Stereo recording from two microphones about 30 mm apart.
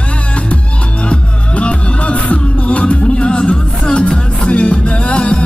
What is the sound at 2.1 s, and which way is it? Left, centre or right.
Music, left.